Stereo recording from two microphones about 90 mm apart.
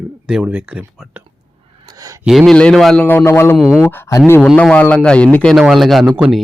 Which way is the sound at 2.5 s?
10° left (ahead or behind).